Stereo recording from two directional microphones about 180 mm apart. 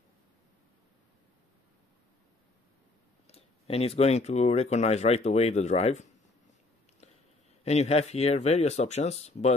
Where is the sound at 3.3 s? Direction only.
35° left (ahead or behind).